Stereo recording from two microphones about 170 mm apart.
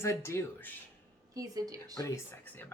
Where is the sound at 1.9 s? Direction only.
15° left (ahead or behind).